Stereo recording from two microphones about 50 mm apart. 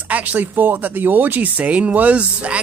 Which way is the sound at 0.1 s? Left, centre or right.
Right.